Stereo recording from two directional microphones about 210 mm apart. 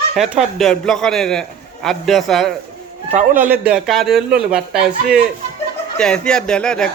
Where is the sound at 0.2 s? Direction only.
Centre (ahead or behind).